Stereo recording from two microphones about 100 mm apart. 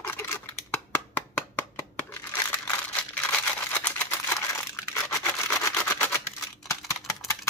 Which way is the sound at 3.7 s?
20° left (ahead or behind).